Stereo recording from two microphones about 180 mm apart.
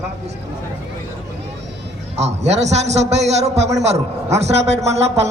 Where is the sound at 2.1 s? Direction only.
35° right (ahead or behind).